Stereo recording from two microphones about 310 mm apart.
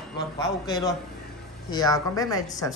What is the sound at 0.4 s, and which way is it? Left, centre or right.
Speech, centre.